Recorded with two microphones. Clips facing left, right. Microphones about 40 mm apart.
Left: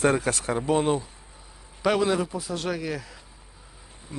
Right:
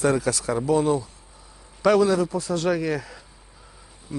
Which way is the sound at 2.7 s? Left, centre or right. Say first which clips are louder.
Right 6 dB; centre.